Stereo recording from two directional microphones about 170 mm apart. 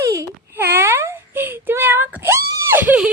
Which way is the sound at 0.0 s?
15° right (ahead or behind).